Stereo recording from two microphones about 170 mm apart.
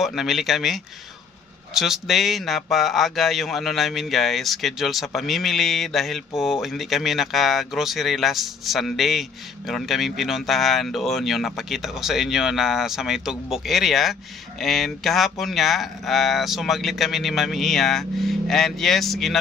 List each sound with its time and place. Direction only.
0.0 s speech: centre (ahead or behind)